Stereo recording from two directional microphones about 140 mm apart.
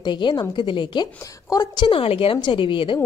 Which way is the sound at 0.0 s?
30° left (ahead or behind).